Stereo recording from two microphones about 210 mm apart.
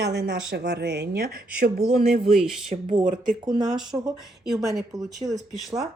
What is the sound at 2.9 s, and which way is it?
Speech, 20° right (ahead or behind).